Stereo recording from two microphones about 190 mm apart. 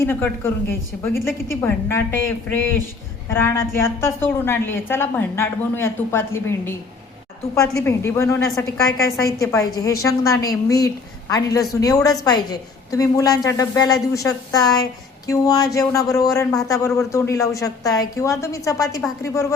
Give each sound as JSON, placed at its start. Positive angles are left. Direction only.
{"t": 0.0, "sound": "a woman's voice", "side_deg": 10}
{"t": 7.9, "sound": "a woman's voice", "side_deg": 15}